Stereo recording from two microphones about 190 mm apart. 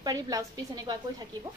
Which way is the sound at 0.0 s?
20° right (ahead or behind).